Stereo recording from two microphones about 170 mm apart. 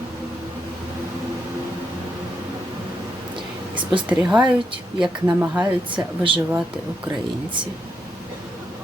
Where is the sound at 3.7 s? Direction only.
30° right (ahead or behind).